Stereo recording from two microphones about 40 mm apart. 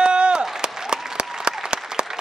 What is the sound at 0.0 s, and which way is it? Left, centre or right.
Chop, right.